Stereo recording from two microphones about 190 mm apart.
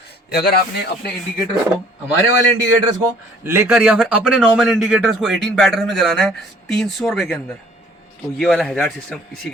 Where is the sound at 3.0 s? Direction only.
15° right (ahead or behind).